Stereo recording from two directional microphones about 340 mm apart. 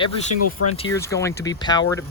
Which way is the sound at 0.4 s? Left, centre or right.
Left.